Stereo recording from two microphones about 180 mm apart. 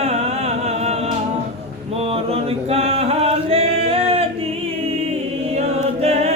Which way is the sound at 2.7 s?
35° right (ahead or behind).